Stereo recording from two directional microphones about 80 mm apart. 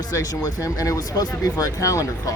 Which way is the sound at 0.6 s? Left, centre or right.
Left.